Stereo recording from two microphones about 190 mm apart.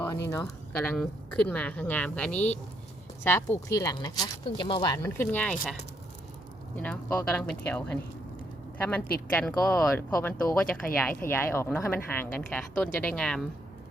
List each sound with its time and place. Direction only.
0.4 s speech: 5° left (ahead or behind)
6.7 s speech: 10° left (ahead or behind)